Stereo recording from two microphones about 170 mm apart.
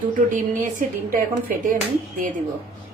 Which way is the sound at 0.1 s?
50° right (ahead or behind).